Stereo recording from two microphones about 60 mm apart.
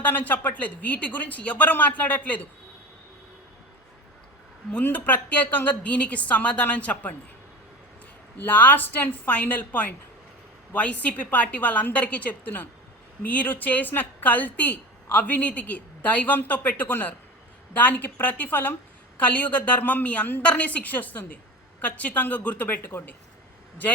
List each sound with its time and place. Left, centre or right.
0.0 s a woman's voice: left
4.8 s a woman's voice: left
8.4 s a woman's voice: left